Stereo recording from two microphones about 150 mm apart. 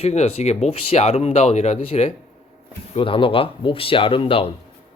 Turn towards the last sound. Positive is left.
turn(degrees=35)  # may be behind; listen again after turning